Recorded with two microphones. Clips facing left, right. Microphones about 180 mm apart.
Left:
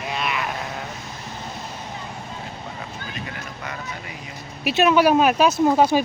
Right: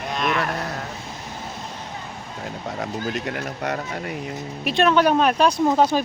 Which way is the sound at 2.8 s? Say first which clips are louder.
Right 8 dB; 70° right (ahead or behind).